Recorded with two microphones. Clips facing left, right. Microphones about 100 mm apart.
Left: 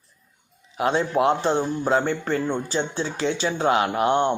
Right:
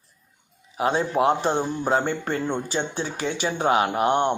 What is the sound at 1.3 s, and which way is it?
Speech, 15° right (ahead or behind).